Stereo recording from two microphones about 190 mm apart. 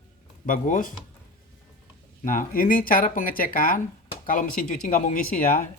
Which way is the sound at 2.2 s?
45° left (ahead or behind).